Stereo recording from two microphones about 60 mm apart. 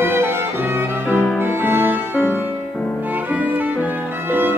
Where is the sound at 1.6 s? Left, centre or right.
Right.